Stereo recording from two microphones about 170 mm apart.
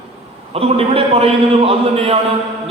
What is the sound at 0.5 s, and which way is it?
A man's voice, 35° right (ahead or behind).